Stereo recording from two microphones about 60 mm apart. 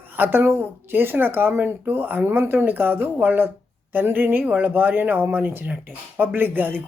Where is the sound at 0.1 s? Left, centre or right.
Right.